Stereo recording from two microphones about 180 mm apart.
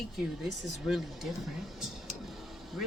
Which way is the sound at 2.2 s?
Centre (ahead or behind).